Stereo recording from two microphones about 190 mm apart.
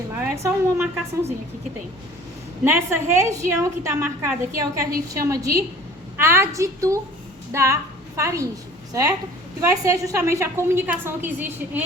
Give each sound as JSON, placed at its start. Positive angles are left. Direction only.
{"t": 0.2, "sound": "a woman's voice", "side_deg": -15}
{"t": 2.6, "sound": "a woman's voice", "side_deg": -15}